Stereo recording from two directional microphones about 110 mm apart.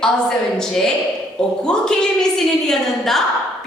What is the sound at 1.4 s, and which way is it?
A woman's voice, 5° left (ahead or behind).